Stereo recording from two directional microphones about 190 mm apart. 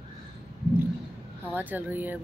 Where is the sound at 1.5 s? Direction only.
10° right (ahead or behind).